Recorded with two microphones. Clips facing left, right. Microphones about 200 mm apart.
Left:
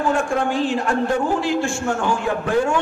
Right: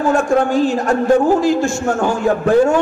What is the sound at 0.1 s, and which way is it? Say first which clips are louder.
A man's voice: right 6 dB; 40° right (ahead or behind).